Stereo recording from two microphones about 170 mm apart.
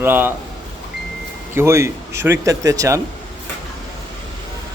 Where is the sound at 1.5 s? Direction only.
15° right (ahead or behind).